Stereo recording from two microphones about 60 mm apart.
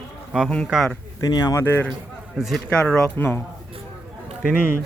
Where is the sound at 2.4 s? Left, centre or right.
Centre.